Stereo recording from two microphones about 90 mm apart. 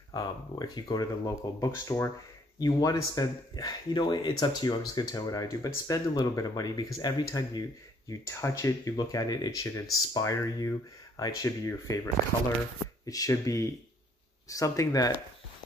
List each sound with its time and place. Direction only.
0.1 s speech: 50° left (ahead or behind)
8.1 s speech: 35° left (ahead or behind)
13.0 s speech: 40° left (ahead or behind)